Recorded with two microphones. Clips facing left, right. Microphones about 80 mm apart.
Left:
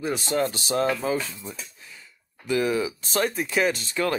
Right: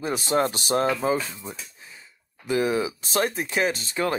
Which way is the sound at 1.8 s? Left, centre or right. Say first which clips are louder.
Even; right.